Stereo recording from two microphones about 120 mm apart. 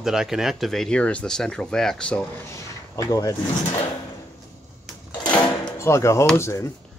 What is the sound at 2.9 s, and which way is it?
Speech, 25° left (ahead or behind).